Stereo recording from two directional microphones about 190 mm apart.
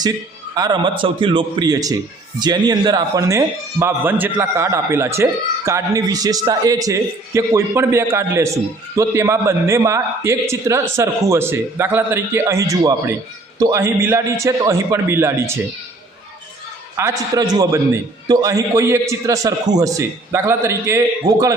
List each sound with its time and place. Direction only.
0.5 s a man's voice: 20° right (ahead or behind)
17.0 s a man's voice: 20° right (ahead or behind)